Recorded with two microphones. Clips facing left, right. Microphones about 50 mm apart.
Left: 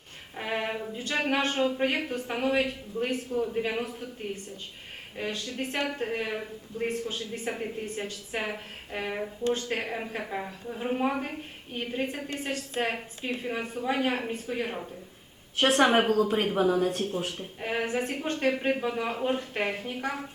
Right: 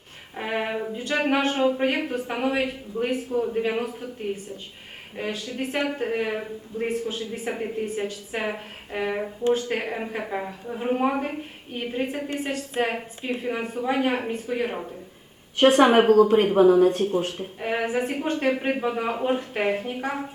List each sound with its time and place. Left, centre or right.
0.3 s music: centre
0.9 s a woman's voice: centre
16.6 s speech: right
16.8 s a woman's voice: centre